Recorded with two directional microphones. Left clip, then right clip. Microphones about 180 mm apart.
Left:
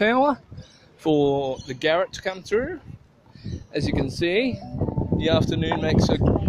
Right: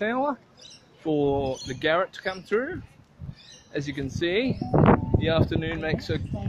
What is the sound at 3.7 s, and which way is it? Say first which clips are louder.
Speech: left 5 dB; 15° left (ahead or behind).